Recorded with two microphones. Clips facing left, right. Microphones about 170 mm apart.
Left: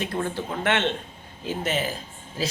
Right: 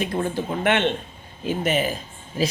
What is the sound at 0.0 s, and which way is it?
A man's voice, 15° right (ahead or behind).